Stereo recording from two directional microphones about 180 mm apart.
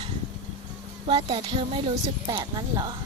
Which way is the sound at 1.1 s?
30° right (ahead or behind).